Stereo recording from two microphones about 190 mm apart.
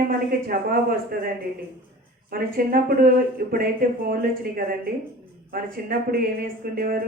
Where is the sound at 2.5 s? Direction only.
50° right (ahead or behind).